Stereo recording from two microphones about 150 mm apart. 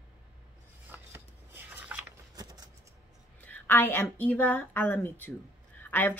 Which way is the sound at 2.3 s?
25° right (ahead or behind).